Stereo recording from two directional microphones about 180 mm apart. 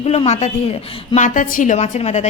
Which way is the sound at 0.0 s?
35° left (ahead or behind).